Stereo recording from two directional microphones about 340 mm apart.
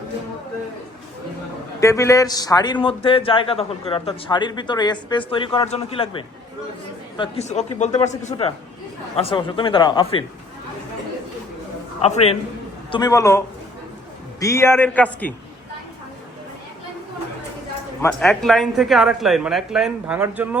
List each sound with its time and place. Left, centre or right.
1.8 s a man's voice: centre
12.0 s a man's voice: centre
18.0 s speech: centre